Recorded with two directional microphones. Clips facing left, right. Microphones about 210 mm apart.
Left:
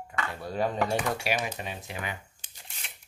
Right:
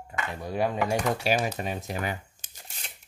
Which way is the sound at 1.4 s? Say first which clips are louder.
Right 5 dB; 45° right (ahead or behind).